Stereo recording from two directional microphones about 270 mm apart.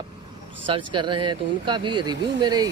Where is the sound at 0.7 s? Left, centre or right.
Centre.